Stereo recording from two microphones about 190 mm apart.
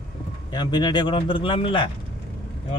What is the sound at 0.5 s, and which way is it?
Speech, 20° left (ahead or behind).